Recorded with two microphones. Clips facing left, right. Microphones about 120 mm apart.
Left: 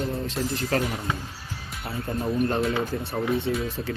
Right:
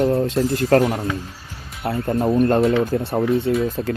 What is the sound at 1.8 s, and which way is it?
Speech, 60° right (ahead or behind).